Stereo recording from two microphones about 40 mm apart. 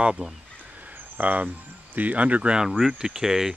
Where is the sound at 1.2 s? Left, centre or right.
Right.